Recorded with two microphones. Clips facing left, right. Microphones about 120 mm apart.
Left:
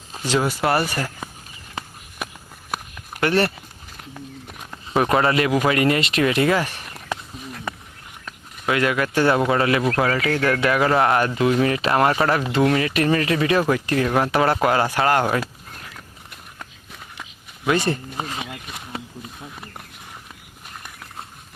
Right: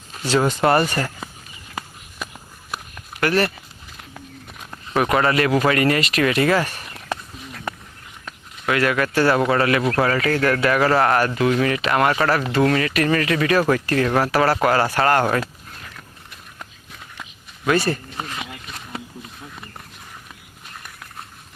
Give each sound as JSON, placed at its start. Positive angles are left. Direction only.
{"t": 0.3, "sound": "speech", "side_deg": 10}
{"t": 3.2, "sound": "speech", "side_deg": 25}
{"t": 4.9, "sound": "speech", "side_deg": 25}
{"t": 8.6, "sound": "speech", "side_deg": 20}
{"t": 17.7, "sound": "speech", "side_deg": 20}
{"t": 18.9, "sound": "a sound", "side_deg": 15}